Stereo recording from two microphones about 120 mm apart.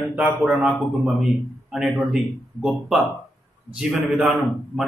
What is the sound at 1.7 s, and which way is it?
Speech, 5° right (ahead or behind).